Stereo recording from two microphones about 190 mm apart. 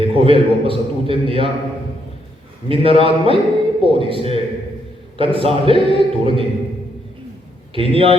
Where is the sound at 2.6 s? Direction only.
30° right (ahead or behind).